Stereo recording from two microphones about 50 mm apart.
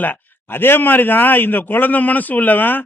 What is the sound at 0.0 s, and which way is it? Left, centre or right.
A man's voice, left.